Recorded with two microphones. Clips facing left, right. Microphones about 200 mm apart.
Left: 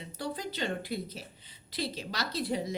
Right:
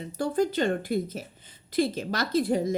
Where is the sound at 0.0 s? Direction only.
50° right (ahead or behind).